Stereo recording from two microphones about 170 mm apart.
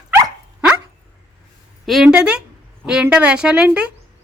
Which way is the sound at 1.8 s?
Centre (ahead or behind).